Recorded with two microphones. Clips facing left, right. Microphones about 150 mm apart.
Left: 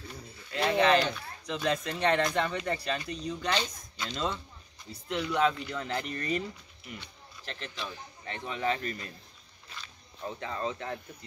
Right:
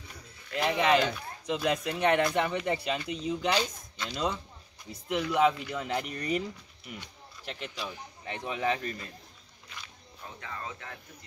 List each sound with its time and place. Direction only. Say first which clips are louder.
0.6 s speech: left 1 dB; 10° right (ahead or behind)
10.4 s speech: left 6 dB; 30° left (ahead or behind)